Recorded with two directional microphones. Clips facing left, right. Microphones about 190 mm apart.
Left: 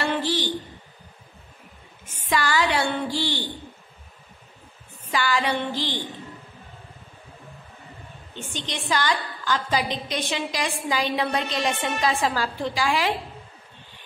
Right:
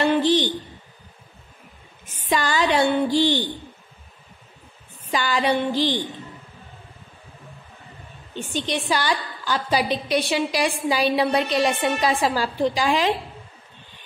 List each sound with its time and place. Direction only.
0.2 s a sound: 20° right (ahead or behind)
2.2 s a woman's voice: 20° right (ahead or behind)
5.1 s a woman's voice: 15° right (ahead or behind)
8.4 s a woman's voice: 15° right (ahead or behind)